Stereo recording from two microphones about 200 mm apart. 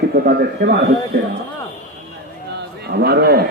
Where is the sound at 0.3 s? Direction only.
55° right (ahead or behind).